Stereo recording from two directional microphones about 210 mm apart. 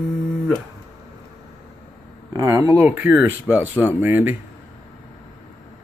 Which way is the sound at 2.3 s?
15° right (ahead or behind).